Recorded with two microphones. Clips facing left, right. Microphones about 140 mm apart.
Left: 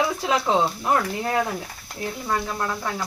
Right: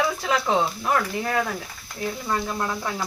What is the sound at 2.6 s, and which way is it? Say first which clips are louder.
Speech: even; 5° right (ahead or behind).